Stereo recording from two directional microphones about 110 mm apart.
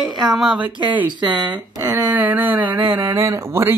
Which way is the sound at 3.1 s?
25° right (ahead or behind).